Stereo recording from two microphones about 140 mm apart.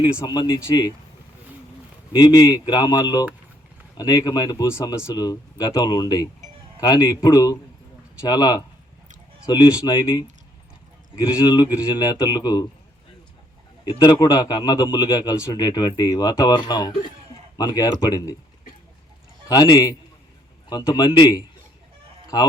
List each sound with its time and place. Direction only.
0.3 s a man's voice: 35° left (ahead or behind)
2.1 s a man's voice: 30° left (ahead or behind)
11.3 s speech: 25° left (ahead or behind)
13.8 s a man's voice: 30° left (ahead or behind)
19.5 s a man's voice: 30° left (ahead or behind)